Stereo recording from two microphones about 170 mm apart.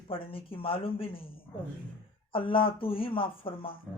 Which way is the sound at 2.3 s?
30° left (ahead or behind).